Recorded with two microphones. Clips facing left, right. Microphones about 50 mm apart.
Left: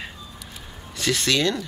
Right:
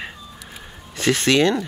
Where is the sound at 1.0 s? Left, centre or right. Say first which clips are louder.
Right 5 dB; right.